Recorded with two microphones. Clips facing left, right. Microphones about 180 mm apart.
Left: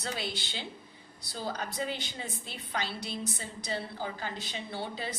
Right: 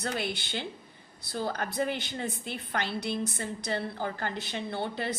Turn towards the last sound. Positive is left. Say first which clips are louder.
# right 4 dB
turn(degrees=-60)  # may be behind; listen again after turning